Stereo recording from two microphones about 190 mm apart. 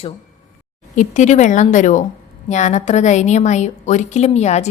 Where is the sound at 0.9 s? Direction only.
40° left (ahead or behind).